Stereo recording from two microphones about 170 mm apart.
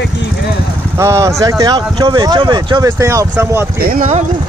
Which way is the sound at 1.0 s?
15° right (ahead or behind).